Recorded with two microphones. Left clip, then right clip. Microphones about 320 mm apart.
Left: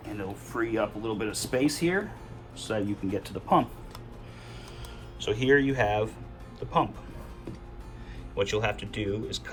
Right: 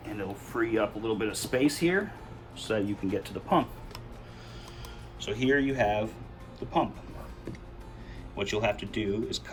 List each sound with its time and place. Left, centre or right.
0.2 s speech: centre
5.2 s speech: centre
8.4 s speech: centre